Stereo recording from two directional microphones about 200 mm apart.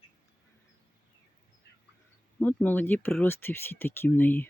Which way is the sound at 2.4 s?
10° left (ahead or behind).